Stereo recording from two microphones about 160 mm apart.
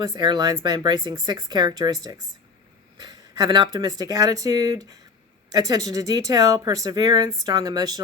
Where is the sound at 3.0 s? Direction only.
25° right (ahead or behind).